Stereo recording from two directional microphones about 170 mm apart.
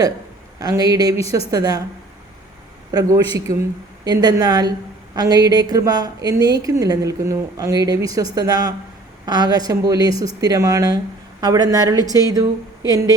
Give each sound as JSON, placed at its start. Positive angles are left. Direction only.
{"t": 0.6, "sound": "a woman's voice", "side_deg": -20}
{"t": 2.9, "sound": "a woman's voice", "side_deg": -20}